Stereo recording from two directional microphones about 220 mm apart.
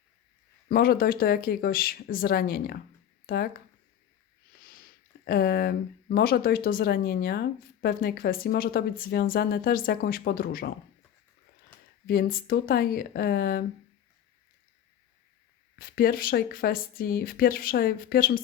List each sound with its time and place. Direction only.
0.7 s speech: 40° left (ahead or behind)
4.6 s speech: 40° left (ahead or behind)
12.0 s speech: 45° left (ahead or behind)
15.7 s speech: 45° left (ahead or behind)